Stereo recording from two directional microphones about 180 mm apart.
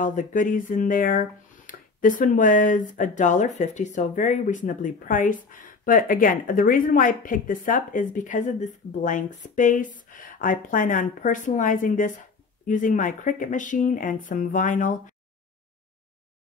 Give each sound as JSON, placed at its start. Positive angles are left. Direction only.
{"t": 0.0, "sound": "speech", "side_deg": 45}